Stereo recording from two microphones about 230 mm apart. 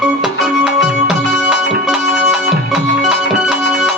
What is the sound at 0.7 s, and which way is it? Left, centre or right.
Music, centre.